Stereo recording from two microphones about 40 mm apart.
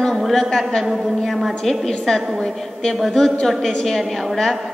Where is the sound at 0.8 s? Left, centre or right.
Centre.